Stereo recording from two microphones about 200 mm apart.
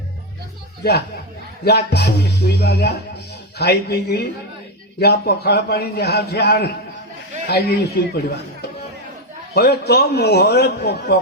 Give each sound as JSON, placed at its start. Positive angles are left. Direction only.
{"t": 1.6, "sound": "a man's voice", "side_deg": 55}
{"t": 9.6, "sound": "a man's voice", "side_deg": 55}